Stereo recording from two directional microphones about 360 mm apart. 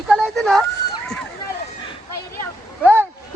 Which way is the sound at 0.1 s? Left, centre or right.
Centre.